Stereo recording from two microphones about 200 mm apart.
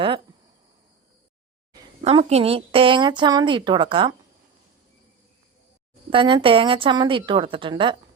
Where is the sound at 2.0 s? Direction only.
30° right (ahead or behind).